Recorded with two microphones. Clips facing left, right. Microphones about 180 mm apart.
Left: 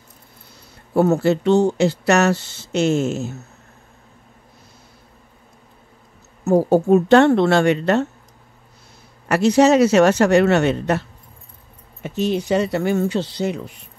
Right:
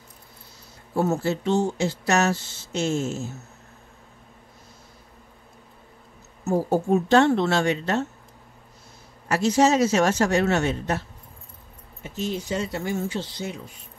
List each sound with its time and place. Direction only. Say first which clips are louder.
0.9 s speech: left 7 dB; 65° left (ahead or behind)
6.4 s a woman's voice: left 7 dB; 70° left (ahead or behind)
9.3 s speech: left 6 dB; 65° left (ahead or behind)